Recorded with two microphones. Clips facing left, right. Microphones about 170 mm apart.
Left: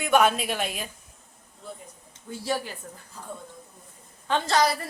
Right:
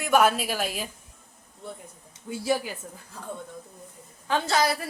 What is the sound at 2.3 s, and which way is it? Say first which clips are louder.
Speech: right 3 dB; 10° right (ahead or behind).